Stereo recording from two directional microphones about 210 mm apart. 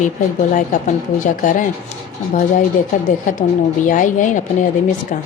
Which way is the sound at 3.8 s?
40° left (ahead or behind).